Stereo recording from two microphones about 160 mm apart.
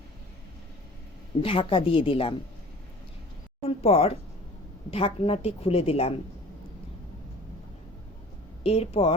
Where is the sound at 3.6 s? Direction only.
40° left (ahead or behind).